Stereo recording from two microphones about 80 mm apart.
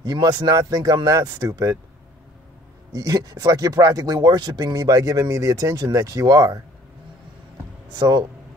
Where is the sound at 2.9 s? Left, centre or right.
Right.